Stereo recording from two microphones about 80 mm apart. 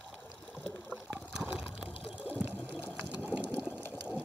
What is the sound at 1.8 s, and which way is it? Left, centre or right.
Water, right.